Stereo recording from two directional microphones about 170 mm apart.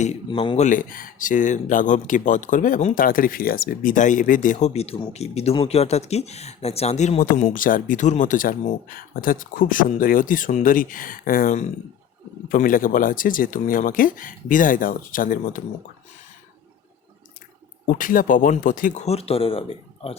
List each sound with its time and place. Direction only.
0.3 s speech: 30° left (ahead or behind); by 15.6 s 55° left (ahead or behind)
17.8 s speech: 50° left (ahead or behind); by 19.6 s 35° left (ahead or behind)